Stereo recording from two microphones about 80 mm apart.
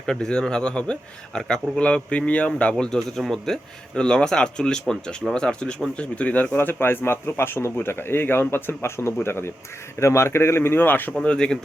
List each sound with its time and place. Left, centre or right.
0.0 s a man's voice: centre
11.1 s a man's voice: centre